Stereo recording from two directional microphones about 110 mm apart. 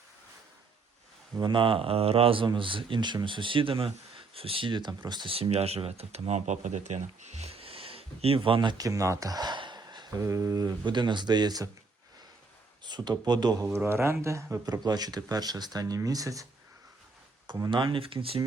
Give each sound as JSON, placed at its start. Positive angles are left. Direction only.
{"t": 1.4, "sound": "speech", "side_deg": -45}
{"t": 5.3, "sound": "speech", "side_deg": -65}
{"t": 8.8, "sound": "speech", "side_deg": -30}
{"t": 10.2, "sound": "speech", "side_deg": -25}
{"t": 12.8, "sound": "speech", "side_deg": -40}
{"t": 13.7, "sound": "speech", "side_deg": -25}
{"t": 17.7, "sound": "speech", "side_deg": -50}